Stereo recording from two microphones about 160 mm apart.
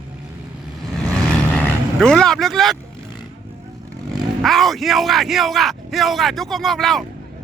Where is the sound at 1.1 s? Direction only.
10° left (ahead or behind).